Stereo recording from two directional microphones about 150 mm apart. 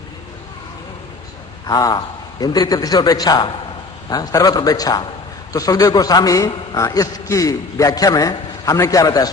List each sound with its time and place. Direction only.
1.6 s a man's voice: 25° left (ahead or behind)